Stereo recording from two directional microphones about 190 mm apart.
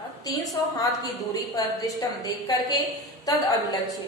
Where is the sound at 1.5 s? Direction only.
20° left (ahead or behind).